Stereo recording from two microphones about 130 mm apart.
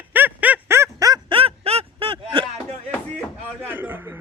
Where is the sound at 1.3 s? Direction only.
50° right (ahead or behind).